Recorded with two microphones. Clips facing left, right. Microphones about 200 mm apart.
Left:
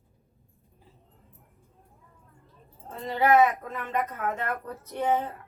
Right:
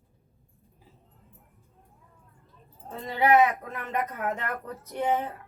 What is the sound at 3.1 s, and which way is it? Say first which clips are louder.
Speech: even; 15° right (ahead or behind).